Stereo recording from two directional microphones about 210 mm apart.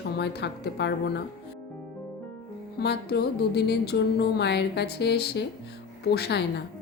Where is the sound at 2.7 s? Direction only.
50° left (ahead or behind).